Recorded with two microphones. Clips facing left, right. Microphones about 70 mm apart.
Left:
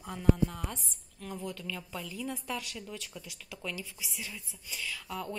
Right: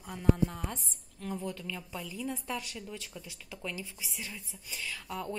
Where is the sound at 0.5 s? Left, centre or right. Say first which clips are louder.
Right 1 dB; centre.